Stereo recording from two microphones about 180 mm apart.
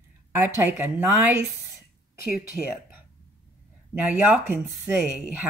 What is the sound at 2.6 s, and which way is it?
Speech, centre (ahead or behind).